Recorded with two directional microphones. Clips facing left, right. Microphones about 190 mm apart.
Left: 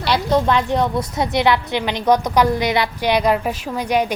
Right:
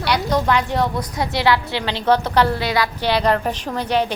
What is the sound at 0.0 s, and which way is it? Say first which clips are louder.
A woman's voice: left 2 dB; 20° left (ahead or behind).